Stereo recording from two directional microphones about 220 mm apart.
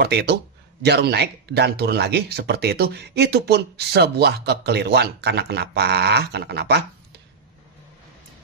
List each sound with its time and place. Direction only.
0.0 s speech: 50° right (ahead or behind)